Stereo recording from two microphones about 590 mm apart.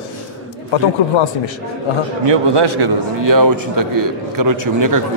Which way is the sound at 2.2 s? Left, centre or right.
Right.